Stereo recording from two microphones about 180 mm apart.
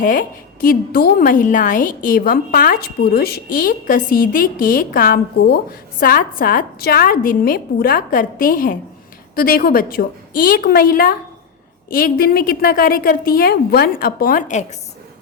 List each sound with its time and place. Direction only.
0.0 s a woman's voice: 50° left (ahead or behind)